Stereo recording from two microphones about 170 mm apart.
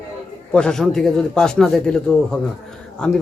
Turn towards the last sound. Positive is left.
turn(degrees=5)  # may be behind; listen again after turning